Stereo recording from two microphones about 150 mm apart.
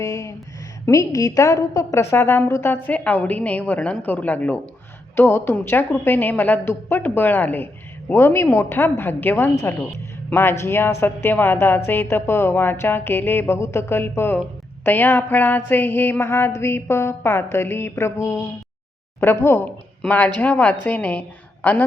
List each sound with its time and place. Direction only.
0.0 s a woman's voice: 20° left (ahead or behind)